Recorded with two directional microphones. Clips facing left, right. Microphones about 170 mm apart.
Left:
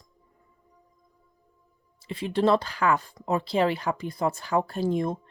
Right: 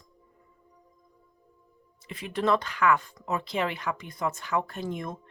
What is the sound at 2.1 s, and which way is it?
Speech, 30° left (ahead or behind).